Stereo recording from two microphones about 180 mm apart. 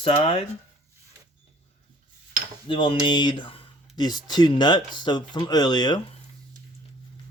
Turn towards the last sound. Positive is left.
turn(degrees=25)  # may be behind; listen again after turning